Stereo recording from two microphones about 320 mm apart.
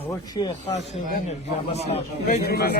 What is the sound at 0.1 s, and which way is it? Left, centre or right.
A man's voice, centre.